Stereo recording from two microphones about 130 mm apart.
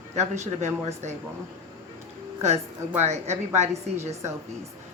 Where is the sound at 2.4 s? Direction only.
60° right (ahead or behind).